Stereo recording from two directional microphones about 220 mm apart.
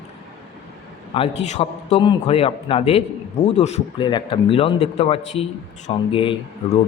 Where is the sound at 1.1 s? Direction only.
25° left (ahead or behind).